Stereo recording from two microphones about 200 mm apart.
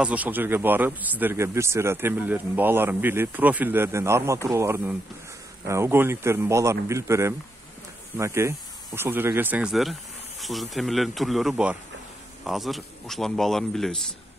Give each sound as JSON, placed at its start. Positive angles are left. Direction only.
{"t": 0.0, "sound": "a man's voice", "side_deg": -5}